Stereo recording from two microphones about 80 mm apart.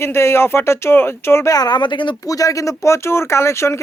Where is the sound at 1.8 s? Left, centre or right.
Left.